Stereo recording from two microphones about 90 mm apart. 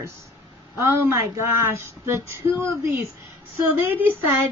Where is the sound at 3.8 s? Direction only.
20° right (ahead or behind).